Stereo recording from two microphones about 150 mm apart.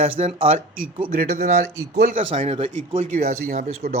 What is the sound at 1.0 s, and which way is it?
Speech, 80° right.